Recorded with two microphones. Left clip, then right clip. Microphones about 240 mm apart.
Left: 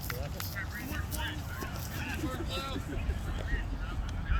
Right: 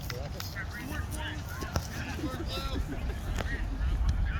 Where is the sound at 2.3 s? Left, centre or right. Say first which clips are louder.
Even; left.